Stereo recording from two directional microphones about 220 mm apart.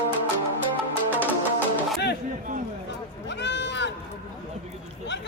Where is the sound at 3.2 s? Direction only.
50° left (ahead or behind).